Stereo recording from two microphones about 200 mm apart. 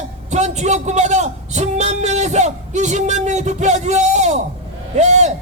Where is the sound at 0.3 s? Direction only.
35° right (ahead or behind).